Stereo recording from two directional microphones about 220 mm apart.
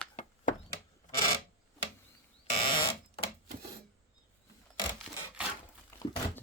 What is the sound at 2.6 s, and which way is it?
Fire alarm, 20° left (ahead or behind).